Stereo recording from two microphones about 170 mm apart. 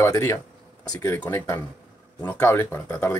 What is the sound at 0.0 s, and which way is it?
Speech, 20° left (ahead or behind).